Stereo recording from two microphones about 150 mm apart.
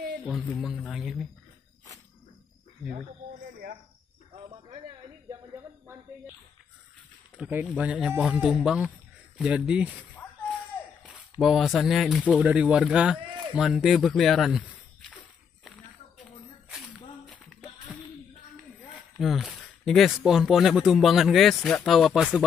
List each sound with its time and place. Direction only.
0.3 s speech: 5° left (ahead or behind)
4.3 s cricket: 40° right (ahead or behind)
7.3 s speech: 10° right (ahead or behind)
11.4 s speech: centre (ahead or behind)
18.9 s speech: centre (ahead or behind)